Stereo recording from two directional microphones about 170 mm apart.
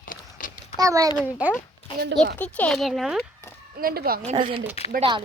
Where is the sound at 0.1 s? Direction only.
55° left (ahead or behind).